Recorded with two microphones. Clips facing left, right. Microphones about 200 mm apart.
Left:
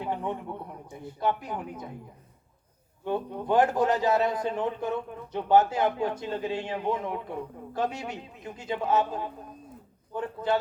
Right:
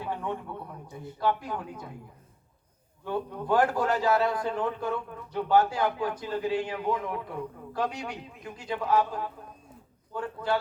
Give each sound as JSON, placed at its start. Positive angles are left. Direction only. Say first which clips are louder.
{"t": 0.0, "sound": "a man's voice", "louder": "left 2 dB", "side_deg": 20}
{"t": 3.0, "sound": "a man's voice", "louder": "left 2 dB", "side_deg": 20}